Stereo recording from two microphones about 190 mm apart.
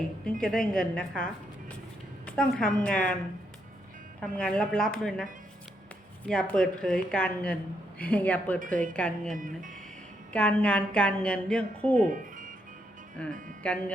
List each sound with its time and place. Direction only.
0.4 s a woman's voice: 5° left (ahead or behind)
4.4 s a woman's voice: 5° left (ahead or behind)
9.3 s speech: 45° right (ahead or behind)
10.3 s a woman's voice: 5° left (ahead or behind)
12.0 s music: 45° right (ahead or behind)
13.2 s a woman's voice: 5° left (ahead or behind)